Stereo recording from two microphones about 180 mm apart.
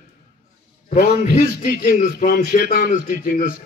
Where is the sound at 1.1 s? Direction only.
55° left (ahead or behind).